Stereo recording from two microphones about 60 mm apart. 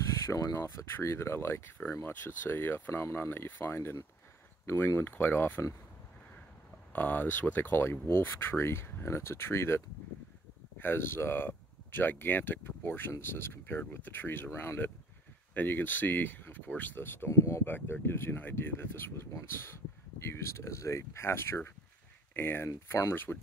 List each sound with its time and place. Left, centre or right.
0.2 s speech: left
6.9 s speech: left
17.3 s speech: left
17.6 s speech: left